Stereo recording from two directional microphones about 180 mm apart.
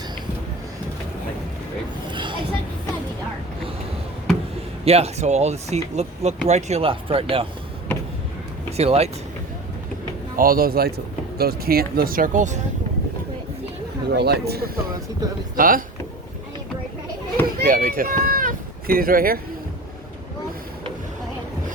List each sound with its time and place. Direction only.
2.0 s a sound: 25° right (ahead or behind)
4.9 s speech: 35° right (ahead or behind)
8.7 s speech: 35° right (ahead or behind)
10.3 s speech: 55° right (ahead or behind)
14.1 s speech: 65° right (ahead or behind)
15.5 s speech: 50° right (ahead or behind)
17.4 s run: 50° right (ahead or behind)